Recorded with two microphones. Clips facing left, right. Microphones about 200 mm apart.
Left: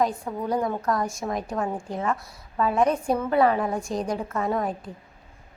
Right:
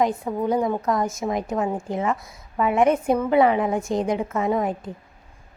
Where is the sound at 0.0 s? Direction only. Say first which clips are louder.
Right 3 dB; 20° right (ahead or behind).